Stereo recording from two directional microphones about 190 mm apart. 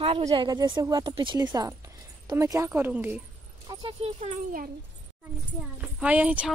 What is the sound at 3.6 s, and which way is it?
Speech, 25° right (ahead or behind).